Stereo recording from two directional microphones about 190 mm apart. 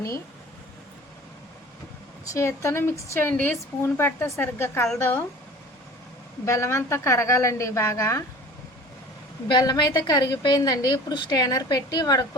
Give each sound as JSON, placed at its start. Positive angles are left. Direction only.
{"t": 2.3, "sound": "speech", "side_deg": 15}
{"t": 6.4, "sound": "speech", "side_deg": 15}
{"t": 9.5, "sound": "a woman's voice", "side_deg": 20}